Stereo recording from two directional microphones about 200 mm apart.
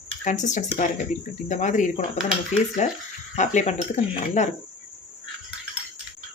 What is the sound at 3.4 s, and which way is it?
Speech, 35° left (ahead or behind).